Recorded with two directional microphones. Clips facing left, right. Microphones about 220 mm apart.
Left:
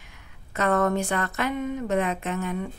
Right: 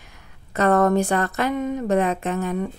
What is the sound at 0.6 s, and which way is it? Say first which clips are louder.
A woman's voice: right 5 dB; 35° right (ahead or behind).